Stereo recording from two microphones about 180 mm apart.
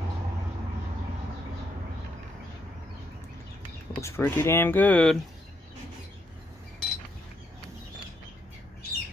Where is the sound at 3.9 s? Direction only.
15° left (ahead or behind).